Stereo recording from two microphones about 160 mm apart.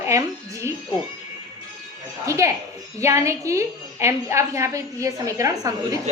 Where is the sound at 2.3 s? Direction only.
20° right (ahead or behind).